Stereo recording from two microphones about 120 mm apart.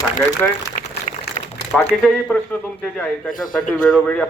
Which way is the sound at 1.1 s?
75° left (ahead or behind).